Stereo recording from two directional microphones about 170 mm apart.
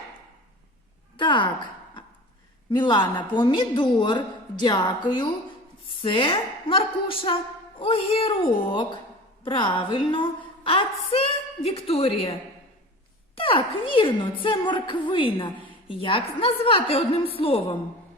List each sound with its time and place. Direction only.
1.1 s a sound: 30° left (ahead or behind)
2.6 s a woman's voice: 25° left (ahead or behind)
13.3 s a woman's voice: 30° left (ahead or behind)